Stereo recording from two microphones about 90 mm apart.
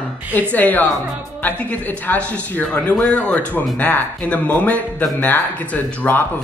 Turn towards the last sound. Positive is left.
turn(degrees=20)  # may be behind; listen again after turning